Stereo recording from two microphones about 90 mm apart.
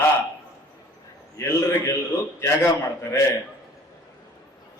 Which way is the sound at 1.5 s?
30° left (ahead or behind).